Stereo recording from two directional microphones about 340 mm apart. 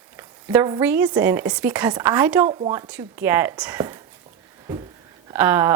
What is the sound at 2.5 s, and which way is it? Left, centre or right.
Speech, centre.